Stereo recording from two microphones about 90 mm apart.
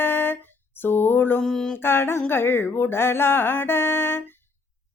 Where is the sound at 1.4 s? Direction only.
5° left (ahead or behind).